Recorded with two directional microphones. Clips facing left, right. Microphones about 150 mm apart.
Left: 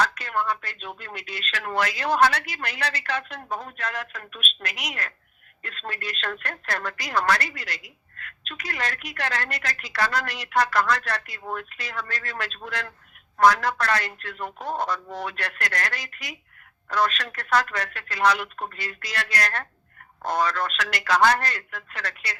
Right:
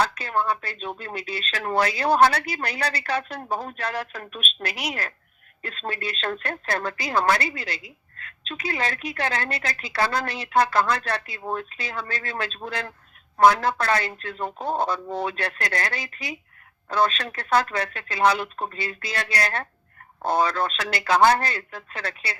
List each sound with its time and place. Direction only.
0.0 s a woman's voice: 30° right (ahead or behind)